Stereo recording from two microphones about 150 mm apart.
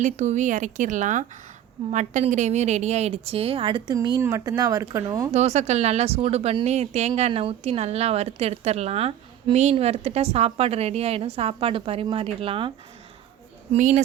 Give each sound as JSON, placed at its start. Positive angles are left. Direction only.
{"t": 0.0, "sound": "a woman's voice", "side_deg": -55}
{"t": 5.3, "sound": "a woman's voice", "side_deg": -50}
{"t": 13.7, "sound": "a woman's voice", "side_deg": -55}